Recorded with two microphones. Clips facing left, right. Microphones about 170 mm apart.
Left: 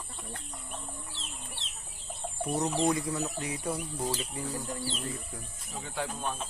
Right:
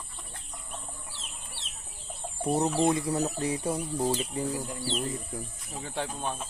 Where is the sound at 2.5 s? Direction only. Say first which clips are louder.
Right 3 dB; 30° right (ahead or behind).